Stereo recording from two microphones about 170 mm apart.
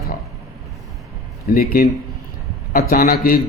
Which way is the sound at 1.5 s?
60° left (ahead or behind).